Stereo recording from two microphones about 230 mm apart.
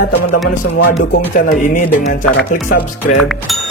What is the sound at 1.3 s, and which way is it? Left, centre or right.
Speech, left.